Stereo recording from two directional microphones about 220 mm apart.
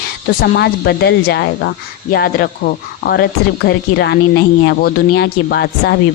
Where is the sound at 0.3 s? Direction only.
50° left (ahead or behind).